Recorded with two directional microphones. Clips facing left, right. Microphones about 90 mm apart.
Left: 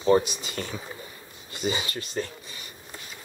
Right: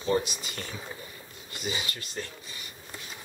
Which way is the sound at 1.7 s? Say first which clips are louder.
Left 5 dB; 35° left (ahead or behind).